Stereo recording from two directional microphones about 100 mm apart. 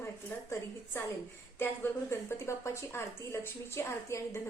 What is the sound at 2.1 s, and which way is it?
Speech, 25° left (ahead or behind).